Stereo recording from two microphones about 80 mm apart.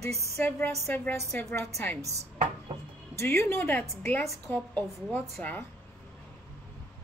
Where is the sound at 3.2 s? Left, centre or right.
Left.